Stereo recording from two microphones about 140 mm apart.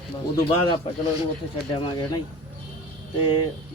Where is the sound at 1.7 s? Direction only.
35° left (ahead or behind).